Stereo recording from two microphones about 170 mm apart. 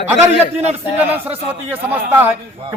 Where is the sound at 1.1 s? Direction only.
10° right (ahead or behind).